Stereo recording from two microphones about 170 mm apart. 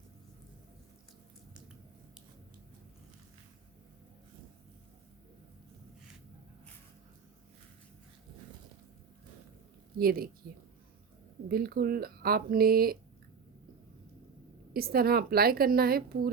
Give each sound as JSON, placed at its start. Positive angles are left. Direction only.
{"t": 10.0, "sound": "a woman's voice", "side_deg": -60}
{"t": 14.7, "sound": "a woman's voice", "side_deg": -60}